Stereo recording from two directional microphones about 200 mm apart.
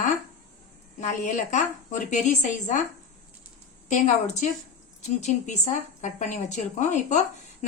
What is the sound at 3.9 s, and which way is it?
A woman's voice, 35° left (ahead or behind).